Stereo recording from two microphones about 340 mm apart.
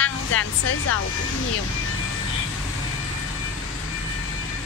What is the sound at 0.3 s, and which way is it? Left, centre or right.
Speech, left.